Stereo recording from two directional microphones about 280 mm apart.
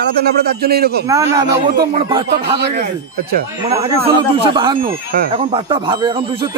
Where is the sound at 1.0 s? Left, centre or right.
Centre.